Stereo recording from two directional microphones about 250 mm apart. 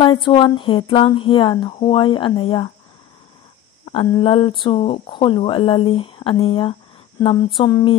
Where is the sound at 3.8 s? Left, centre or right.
Left.